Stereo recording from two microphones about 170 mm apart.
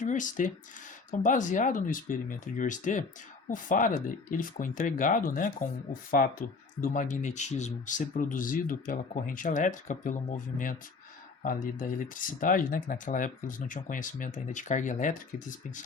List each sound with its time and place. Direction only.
0.0 s speech: 50° left (ahead or behind)